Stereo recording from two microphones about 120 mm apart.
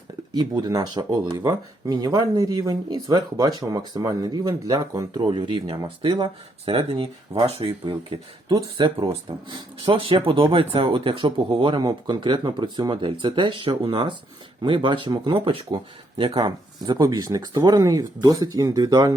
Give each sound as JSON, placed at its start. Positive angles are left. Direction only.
{"t": 0.3, "sound": "speech", "side_deg": -35}
{"t": 8.4, "sound": "speech", "side_deg": -40}